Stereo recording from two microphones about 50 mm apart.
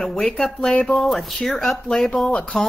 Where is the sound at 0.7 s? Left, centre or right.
Left.